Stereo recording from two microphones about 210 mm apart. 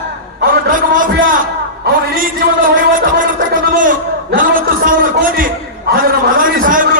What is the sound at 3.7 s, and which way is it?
A man's voice, 40° right (ahead or behind).